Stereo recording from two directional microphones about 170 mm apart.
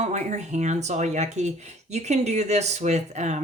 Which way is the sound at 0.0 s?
45° right (ahead or behind).